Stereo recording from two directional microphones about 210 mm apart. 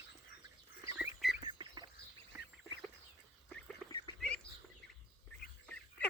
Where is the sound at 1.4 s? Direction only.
20° right (ahead or behind).